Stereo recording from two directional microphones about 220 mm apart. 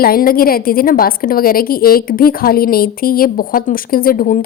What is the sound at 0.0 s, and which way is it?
A woman's voice, 40° left (ahead or behind).